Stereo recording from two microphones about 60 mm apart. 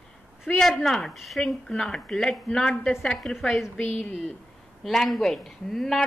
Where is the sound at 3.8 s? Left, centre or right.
Left.